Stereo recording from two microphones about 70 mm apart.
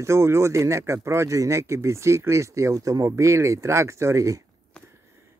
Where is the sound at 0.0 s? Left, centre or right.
Right.